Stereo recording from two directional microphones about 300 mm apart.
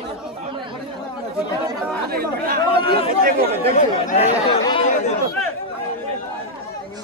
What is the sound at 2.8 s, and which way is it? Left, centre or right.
Speech, centre.